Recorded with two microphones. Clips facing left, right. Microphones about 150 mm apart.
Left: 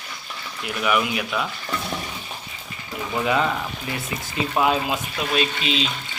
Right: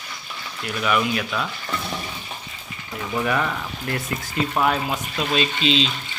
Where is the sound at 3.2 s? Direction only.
20° left (ahead or behind).